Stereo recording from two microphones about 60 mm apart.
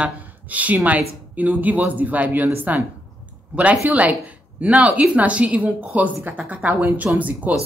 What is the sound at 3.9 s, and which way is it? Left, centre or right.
Speech, right.